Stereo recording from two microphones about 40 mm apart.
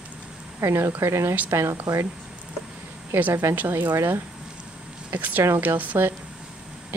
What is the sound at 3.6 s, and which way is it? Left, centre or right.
Speech, right.